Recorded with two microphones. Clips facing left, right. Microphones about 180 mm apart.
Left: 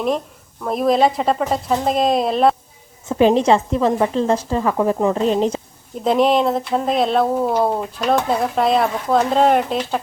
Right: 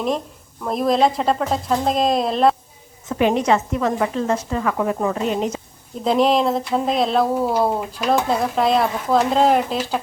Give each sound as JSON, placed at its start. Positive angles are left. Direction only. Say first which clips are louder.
{"t": 0.6, "sound": "speech", "louder": "left 2 dB", "side_deg": 0}
{"t": 3.1, "sound": "a woman's voice", "louder": "left 4 dB", "side_deg": 30}
{"t": 6.1, "sound": "speech", "louder": "left 1 dB", "side_deg": 0}